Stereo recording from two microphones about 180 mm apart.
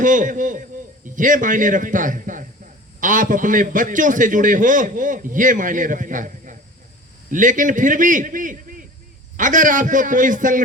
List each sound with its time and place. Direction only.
0.0 s a man's voice: 45° right (ahead or behind)